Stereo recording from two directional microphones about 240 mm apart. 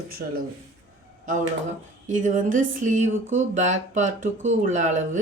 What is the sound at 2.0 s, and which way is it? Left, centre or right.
Speech, right.